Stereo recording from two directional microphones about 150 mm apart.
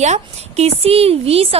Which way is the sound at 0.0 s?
45° right (ahead or behind).